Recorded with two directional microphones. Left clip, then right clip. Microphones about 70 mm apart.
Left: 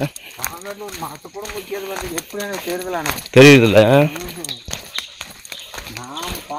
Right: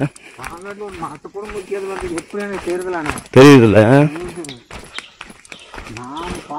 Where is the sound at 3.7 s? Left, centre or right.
Right.